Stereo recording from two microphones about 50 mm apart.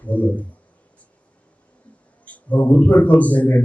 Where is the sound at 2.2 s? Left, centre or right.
Left.